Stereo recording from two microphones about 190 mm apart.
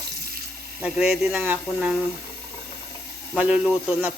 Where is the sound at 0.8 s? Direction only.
5° right (ahead or behind).